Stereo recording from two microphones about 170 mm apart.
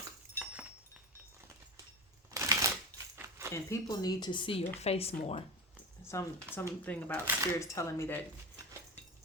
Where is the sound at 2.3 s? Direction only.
20° right (ahead or behind).